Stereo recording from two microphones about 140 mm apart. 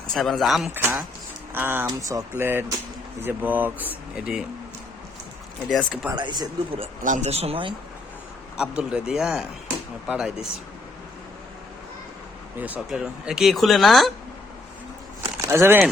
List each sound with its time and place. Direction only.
0.1 s speech: centre (ahead or behind)
0.7 s speech: 15° right (ahead or behind)
5.6 s speech: centre (ahead or behind)
6.1 s speech: 30° right (ahead or behind)
7.0 s speech: 60° right (ahead or behind); by 7.7 s 45° right (ahead or behind)
8.5 s speech: 5° right (ahead or behind)
12.5 s speech: 10° right (ahead or behind)
15.4 s speech: 20° right (ahead or behind)